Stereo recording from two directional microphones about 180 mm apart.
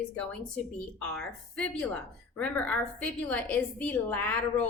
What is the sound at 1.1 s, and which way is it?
A woman's voice, 5° left (ahead or behind).